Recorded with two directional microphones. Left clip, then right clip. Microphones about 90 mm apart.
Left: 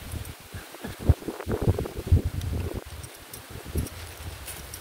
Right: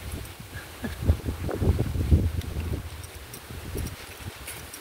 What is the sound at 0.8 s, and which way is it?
Heart sounds, 20° right (ahead or behind).